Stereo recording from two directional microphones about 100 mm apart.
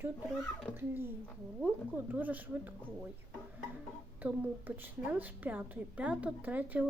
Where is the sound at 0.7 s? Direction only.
20° right (ahead or behind).